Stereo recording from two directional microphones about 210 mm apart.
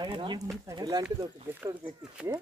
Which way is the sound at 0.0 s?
20° right (ahead or behind).